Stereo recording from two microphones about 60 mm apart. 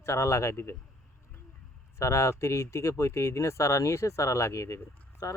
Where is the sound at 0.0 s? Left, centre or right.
Left.